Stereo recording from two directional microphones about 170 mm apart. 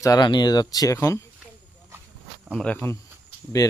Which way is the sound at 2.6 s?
5° left (ahead or behind).